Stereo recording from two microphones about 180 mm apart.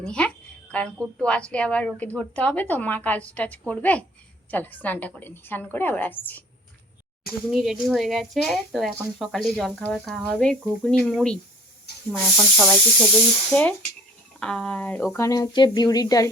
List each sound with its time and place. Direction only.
0.0 s a woman's voice: 5° left (ahead or behind)
7.3 s speech: centre (ahead or behind)
11.9 s a sound: 65° left (ahead or behind)
12.4 s speech: centre (ahead or behind); by 16.3 s 20° left (ahead or behind)